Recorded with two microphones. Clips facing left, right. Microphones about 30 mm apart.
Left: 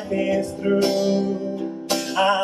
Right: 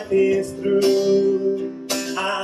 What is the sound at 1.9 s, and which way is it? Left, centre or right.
Music, centre.